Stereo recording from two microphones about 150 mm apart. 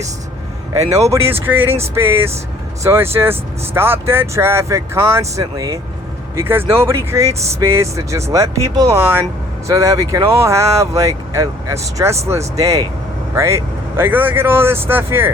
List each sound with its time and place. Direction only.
1.1 s speech: 15° right (ahead or behind)